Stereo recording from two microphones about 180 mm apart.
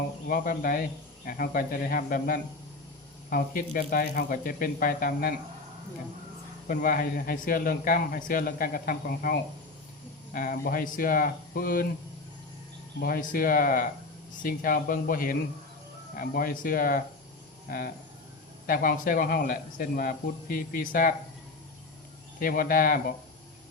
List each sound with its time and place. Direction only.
0.3 s a man's voice: 50° left (ahead or behind)
6.7 s a man's voice: 55° left (ahead or behind)
13.0 s a man's voice: 55° left (ahead or behind)
22.4 s a man's voice: 50° left (ahead or behind)